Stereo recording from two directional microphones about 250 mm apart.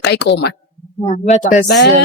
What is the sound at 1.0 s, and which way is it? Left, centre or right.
Speech, left.